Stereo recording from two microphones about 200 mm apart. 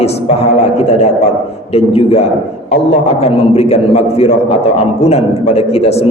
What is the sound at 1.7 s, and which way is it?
A man's voice, 30° left (ahead or behind).